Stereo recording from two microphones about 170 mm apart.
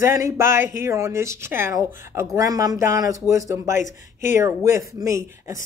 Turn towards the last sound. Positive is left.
turn(degrees=-15)  # may be behind; listen again after turning